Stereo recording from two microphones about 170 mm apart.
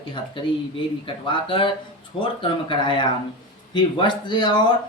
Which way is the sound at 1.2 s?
30° left (ahead or behind).